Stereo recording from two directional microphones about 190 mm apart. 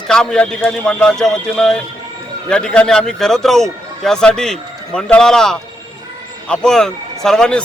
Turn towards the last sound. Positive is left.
turn(degrees=5)  # may be behind; listen again after turning